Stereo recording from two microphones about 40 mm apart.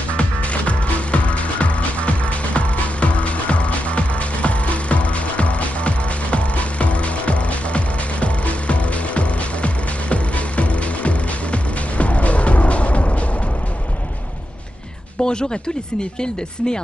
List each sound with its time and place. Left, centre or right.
0.2 s music: left
15.2 s speech: left